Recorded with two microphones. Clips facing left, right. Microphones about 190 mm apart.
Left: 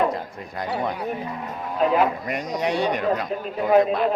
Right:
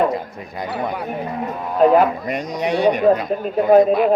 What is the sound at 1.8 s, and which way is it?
Speech, 45° right (ahead or behind).